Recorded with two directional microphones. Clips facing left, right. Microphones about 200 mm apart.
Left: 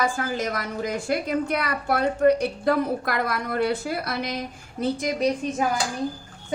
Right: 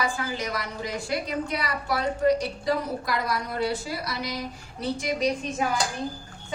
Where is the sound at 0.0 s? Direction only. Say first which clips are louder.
Left 4 dB; 50° left (ahead or behind).